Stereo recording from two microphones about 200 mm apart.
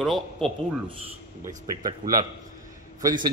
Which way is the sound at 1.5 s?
20° right (ahead or behind).